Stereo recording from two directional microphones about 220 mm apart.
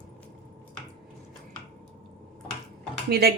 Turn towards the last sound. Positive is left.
turn(degrees=-45)  # may be behind; listen again after turning